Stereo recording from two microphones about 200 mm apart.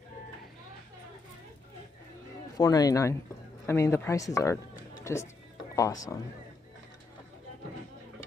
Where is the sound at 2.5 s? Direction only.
20° left (ahead or behind).